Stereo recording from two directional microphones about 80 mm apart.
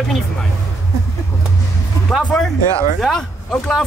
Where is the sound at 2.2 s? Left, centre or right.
Centre.